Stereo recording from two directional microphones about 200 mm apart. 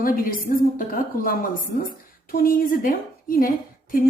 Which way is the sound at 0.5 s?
40° left (ahead or behind).